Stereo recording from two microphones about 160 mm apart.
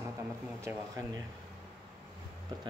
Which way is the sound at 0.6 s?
20° right (ahead or behind).